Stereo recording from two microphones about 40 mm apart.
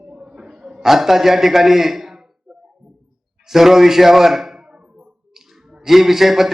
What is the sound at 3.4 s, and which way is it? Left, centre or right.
A man's voice, centre.